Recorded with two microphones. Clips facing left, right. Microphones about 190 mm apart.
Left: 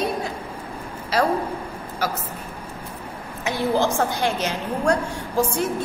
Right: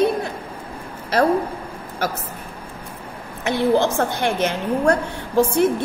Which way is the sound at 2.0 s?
55° right (ahead or behind).